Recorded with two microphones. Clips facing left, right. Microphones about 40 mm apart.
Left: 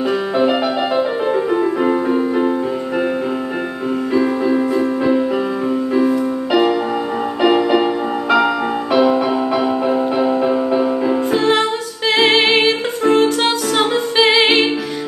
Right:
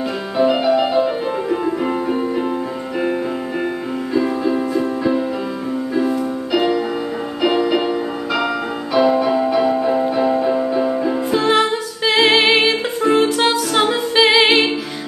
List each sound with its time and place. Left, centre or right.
0.4 s music: left
1.5 s music: centre
4.1 s music: centre
4.7 s music: left
7.4 s music: centre
8.9 s music: left
11.3 s music: centre